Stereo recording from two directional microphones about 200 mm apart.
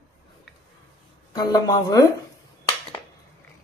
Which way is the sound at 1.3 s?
20° left (ahead or behind).